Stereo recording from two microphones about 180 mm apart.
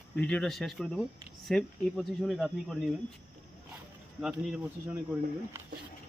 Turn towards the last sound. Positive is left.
turn(degrees=-10)  # may be behind; listen again after turning